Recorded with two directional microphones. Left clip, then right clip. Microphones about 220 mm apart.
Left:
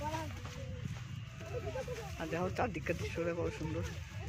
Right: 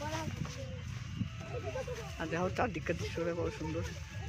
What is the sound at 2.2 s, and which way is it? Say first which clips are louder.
Speech: right 2 dB; 15° right (ahead or behind).